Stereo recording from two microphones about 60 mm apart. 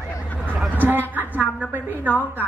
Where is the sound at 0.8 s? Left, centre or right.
Right.